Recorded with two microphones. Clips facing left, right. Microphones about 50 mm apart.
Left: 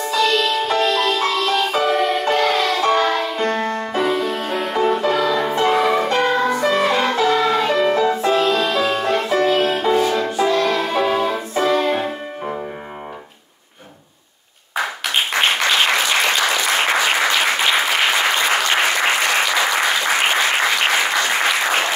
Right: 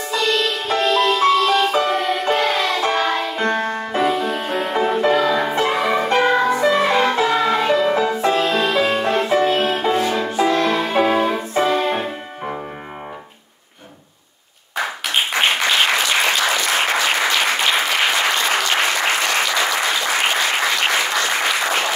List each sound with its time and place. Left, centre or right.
0.1 s music: centre
8.5 s music: right
9.6 s music: centre
10.3 s music: right
11.6 s music: centre
14.8 s applause: centre